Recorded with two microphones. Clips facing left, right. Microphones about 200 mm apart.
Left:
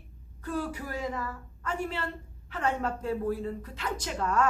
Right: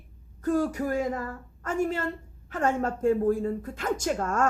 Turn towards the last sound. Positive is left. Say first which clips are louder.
# right 2 dB
turn(degrees=-45)  # may be behind; listen again after turning